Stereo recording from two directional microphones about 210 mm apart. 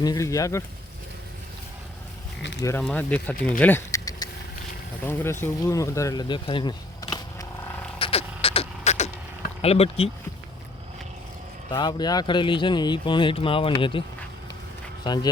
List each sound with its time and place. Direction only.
0.0 s speech: 15° left (ahead or behind)
2.6 s speech: 15° left (ahead or behind)
3.6 s keys jangling: 10° left (ahead or behind)
5.0 s speech: 10° left (ahead or behind)
7.9 s mechanisms: 25° left (ahead or behind)
11.7 s speech: 20° left (ahead or behind)
15.0 s speech: 20° left (ahead or behind)